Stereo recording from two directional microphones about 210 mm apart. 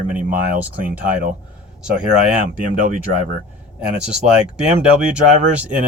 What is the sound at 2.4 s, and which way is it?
Speech, 40° right (ahead or behind).